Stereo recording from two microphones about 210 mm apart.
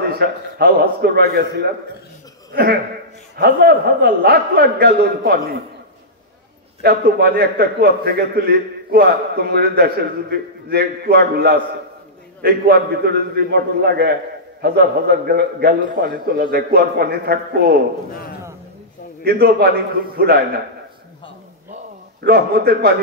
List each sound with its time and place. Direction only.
0.1 s a man's voice: 50° right (ahead or behind)
6.8 s a man's voice: 50° right (ahead or behind)
19.2 s a man's voice: 50° right (ahead or behind)
22.2 s a man's voice: 50° right (ahead or behind)